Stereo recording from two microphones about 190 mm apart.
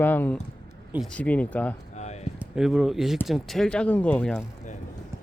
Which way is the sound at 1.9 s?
35° left (ahead or behind).